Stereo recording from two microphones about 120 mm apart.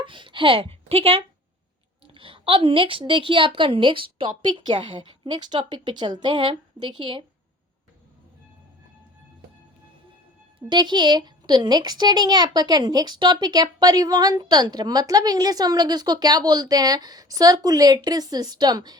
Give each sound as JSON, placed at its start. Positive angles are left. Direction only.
{"t": 0.0, "sound": "a woman's voice", "side_deg": -45}
{"t": 10.7, "sound": "speech", "side_deg": -40}